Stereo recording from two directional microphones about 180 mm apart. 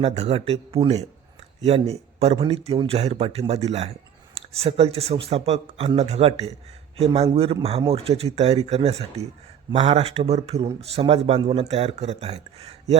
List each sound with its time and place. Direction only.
0.0 s speech: 35° right (ahead or behind)